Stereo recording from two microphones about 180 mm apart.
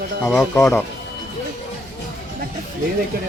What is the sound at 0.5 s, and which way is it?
Speech, 15° left (ahead or behind).